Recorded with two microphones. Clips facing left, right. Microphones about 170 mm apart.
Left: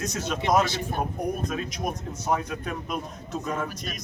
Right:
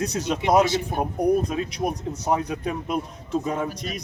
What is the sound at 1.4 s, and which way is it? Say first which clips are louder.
A man's voice: right 4 dB; 30° right (ahead or behind).